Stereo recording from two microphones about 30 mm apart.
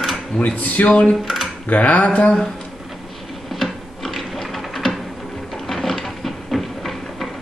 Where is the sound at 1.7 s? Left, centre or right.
Left.